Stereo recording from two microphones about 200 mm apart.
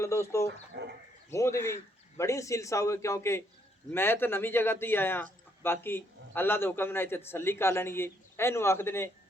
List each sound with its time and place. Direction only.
0.0 s a man's voice: 15° left (ahead or behind)
0.7 s speech: 55° right (ahead or behind)
1.3 s a man's voice: 15° left (ahead or behind)